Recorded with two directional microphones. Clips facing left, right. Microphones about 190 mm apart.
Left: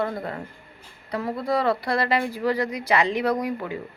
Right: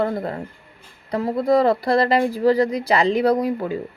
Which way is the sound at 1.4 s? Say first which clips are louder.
Right 7 dB; 45° right (ahead or behind).